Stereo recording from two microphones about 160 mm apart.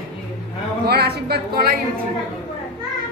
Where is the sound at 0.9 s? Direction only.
80° right.